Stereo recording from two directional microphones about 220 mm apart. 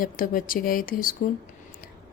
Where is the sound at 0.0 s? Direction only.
40° left (ahead or behind).